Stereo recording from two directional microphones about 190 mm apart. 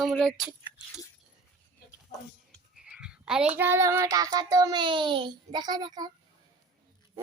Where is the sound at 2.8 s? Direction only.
5° right (ahead or behind); by 6.1 s 20° right (ahead or behind).